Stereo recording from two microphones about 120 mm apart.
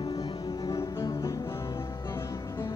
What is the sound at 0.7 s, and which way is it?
Music, 25° left (ahead or behind).